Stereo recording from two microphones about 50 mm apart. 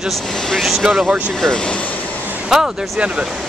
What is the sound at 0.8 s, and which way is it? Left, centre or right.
Speech, centre.